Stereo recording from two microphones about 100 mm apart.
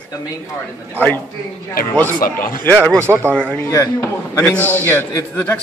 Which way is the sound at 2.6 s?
20° left (ahead or behind).